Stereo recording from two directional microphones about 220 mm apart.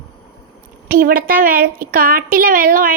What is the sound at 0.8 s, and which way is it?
A woman's voice, 40° right (ahead or behind).